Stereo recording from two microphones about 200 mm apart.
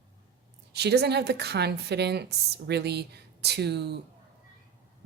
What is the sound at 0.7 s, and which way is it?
A woman's voice, 55° right (ahead or behind).